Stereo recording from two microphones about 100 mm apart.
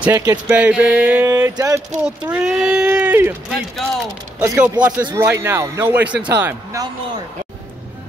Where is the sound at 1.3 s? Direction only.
35° right (ahead or behind).